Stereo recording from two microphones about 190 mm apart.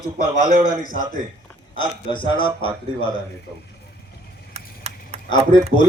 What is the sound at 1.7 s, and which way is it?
A man's voice, 25° left (ahead or behind).